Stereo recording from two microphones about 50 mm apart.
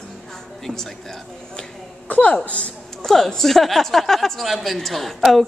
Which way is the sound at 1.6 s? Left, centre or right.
Left.